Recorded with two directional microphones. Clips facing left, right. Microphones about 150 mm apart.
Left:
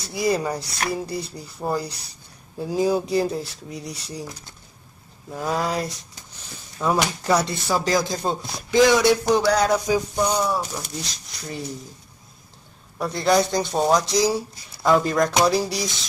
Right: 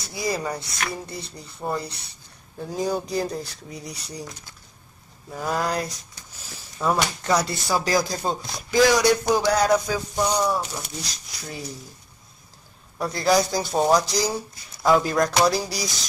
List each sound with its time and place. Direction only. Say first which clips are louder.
0.1 s speech: left 4 dB; centre (ahead or behind)
0.6 s speech: left 4 dB; 30° left (ahead or behind)
1.3 s speech: right 1 dB; 5° left (ahead or behind)
1.8 s speech: left 3 dB; 35° left (ahead or behind)
2.6 s speech: left 5 dB; 5° left (ahead or behind)
5.3 s speech: left 1 dB; centre (ahead or behind)
9.4 s a sound: even; 5° right (ahead or behind)
9.8 s speech: left 3 dB; 15° left (ahead or behind); by 11.6 s centre (ahead or behind)
12.9 s speech: left 1 dB; centre (ahead or behind)